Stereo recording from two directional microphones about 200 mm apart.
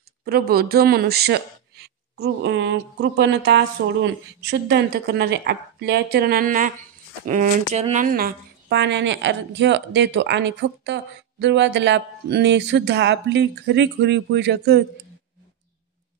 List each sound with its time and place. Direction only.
0.2 s speech: 50° right (ahead or behind)